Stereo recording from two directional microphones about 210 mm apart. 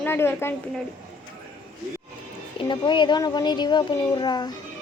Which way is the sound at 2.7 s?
20° left (ahead or behind).